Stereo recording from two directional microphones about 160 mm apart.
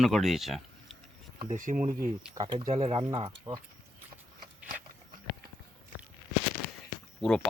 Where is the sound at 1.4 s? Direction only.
55° right (ahead or behind).